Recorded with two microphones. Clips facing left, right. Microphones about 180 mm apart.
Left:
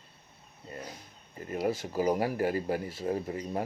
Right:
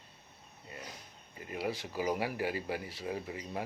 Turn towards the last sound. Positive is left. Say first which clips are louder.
# left 6 dB
turn(degrees=45)  # may be behind; listen again after turning